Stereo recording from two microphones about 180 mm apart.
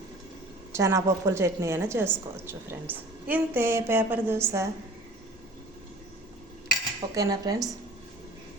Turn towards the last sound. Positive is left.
turn(degrees=-20)  # may be behind; listen again after turning